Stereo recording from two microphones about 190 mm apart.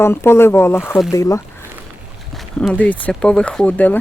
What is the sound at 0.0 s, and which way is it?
Speech, 15° left (ahead or behind).